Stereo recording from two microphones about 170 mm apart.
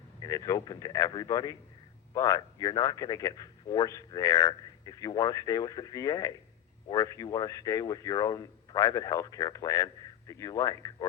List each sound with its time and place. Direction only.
0.2 s speech: 20° left (ahead or behind)